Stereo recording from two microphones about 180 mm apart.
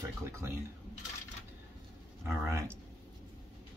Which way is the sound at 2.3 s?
15° right (ahead or behind).